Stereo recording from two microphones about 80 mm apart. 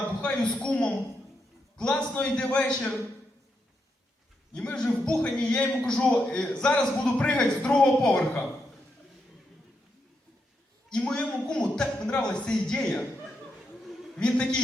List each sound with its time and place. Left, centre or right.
0.0 s a man's voice: centre
4.5 s a man's voice: centre
10.8 s a man's voice: centre
14.2 s a man's voice: centre